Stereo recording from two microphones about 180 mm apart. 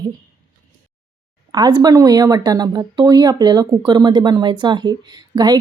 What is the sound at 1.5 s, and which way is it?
Speech, 20° right (ahead or behind).